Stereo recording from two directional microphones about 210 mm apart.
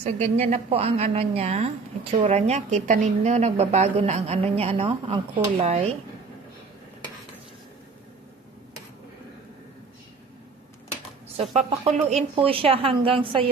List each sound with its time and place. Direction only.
0.0 s a woman's voice: 30° right (ahead or behind)
11.5 s a woman's voice: 30° right (ahead or behind)